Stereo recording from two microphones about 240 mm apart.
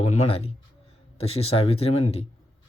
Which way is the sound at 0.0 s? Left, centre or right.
Left.